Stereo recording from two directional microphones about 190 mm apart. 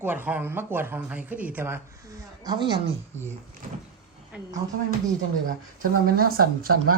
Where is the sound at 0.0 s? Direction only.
10° right (ahead or behind).